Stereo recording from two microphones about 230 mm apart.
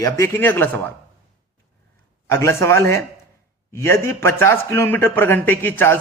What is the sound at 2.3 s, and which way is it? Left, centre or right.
Speech, centre.